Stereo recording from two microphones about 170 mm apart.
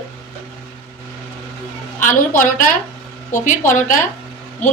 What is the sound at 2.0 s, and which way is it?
Speech, 50° left (ahead or behind).